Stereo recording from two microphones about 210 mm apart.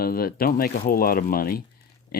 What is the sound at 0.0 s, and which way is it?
Speech, 45° left (ahead or behind).